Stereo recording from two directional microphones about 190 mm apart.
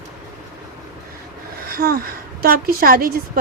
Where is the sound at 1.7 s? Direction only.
50° right (ahead or behind).